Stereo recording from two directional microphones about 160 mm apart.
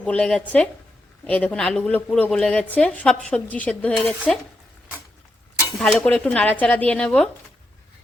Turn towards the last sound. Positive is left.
turn(degrees=5)  # may be behind; listen again after turning